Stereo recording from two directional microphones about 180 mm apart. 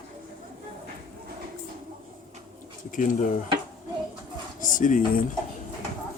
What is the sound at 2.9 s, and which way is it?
Speech, 45° left (ahead or behind).